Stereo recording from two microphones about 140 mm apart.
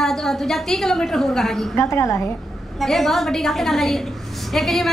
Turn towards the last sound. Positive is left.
turn(degrees=0)  # may be behind; listen again after turning